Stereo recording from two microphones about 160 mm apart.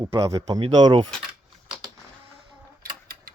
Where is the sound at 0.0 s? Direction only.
20° right (ahead or behind).